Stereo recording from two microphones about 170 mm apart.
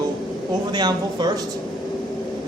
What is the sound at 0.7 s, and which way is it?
Speech, 25° right (ahead or behind).